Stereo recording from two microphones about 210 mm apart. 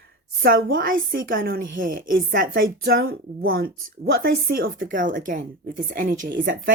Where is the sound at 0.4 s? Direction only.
45° right (ahead or behind).